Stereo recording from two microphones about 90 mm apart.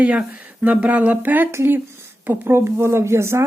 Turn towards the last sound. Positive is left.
turn(degrees=-30)  # may be behind; listen again after turning